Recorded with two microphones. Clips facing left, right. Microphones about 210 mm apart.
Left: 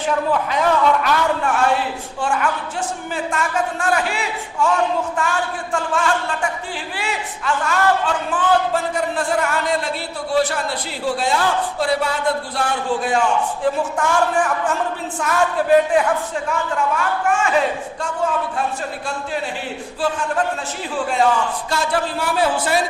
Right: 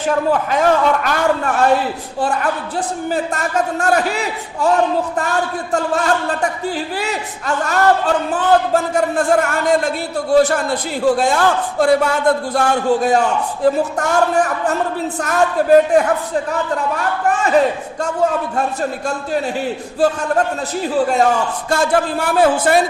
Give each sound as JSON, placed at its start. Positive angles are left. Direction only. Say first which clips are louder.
{"t": 0.3, "sound": "a man's voice", "louder": "right 5 dB", "side_deg": -45}